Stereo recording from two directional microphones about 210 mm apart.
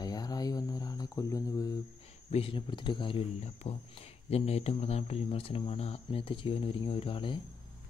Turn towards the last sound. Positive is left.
turn(degrees=25)  # may be behind; listen again after turning